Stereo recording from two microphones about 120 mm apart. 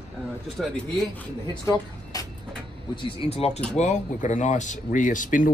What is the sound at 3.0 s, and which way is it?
Speech, 60° left (ahead or behind).